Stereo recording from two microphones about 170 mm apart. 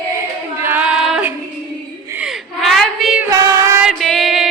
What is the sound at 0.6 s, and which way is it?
Female singing, 10° right (ahead or behind).